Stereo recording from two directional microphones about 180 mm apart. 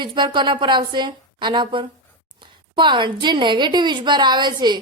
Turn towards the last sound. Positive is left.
turn(degrees=-25)  # may be behind; listen again after turning